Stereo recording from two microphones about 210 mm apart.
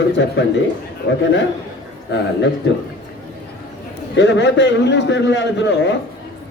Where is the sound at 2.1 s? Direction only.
55° left (ahead or behind).